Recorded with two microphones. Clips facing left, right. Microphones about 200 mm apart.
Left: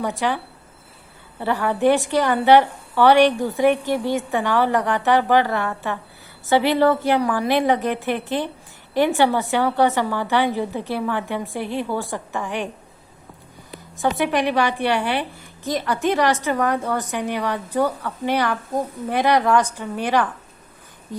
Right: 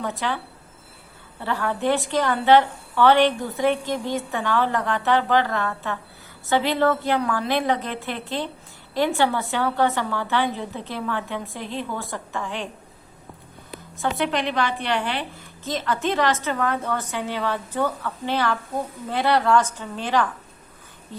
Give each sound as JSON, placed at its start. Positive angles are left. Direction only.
{"t": 0.0, "sound": "a woman's voice", "side_deg": 15}
{"t": 1.4, "sound": "a woman's voice", "side_deg": 15}
{"t": 14.2, "sound": "a woman's voice", "side_deg": 15}